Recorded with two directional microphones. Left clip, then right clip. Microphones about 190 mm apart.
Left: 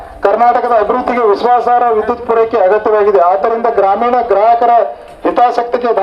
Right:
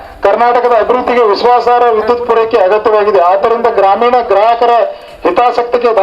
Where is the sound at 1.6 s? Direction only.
45° right (ahead or behind).